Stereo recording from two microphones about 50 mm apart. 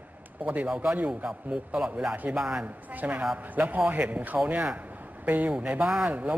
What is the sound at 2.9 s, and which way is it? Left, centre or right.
Speech, right.